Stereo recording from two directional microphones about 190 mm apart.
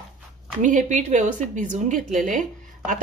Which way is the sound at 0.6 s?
40° right (ahead or behind).